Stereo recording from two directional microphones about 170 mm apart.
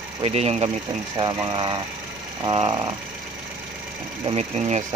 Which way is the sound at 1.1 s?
25° right (ahead or behind).